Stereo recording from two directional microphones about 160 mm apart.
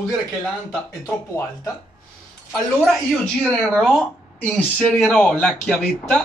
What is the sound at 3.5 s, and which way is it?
Speech, centre (ahead or behind).